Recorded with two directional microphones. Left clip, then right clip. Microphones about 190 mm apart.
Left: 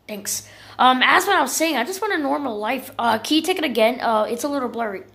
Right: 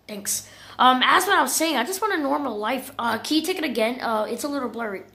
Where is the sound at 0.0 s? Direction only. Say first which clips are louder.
Left 2 dB; 5° left (ahead or behind).